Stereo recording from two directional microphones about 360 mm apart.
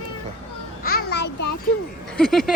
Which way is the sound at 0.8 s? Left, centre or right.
Left.